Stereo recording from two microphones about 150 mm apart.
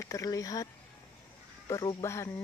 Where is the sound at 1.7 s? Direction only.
25° left (ahead or behind).